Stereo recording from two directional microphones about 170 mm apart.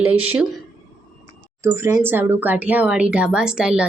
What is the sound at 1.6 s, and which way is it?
A woman's voice, 15° right (ahead or behind).